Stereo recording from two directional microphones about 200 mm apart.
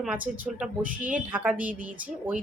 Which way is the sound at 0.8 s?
40° right (ahead or behind).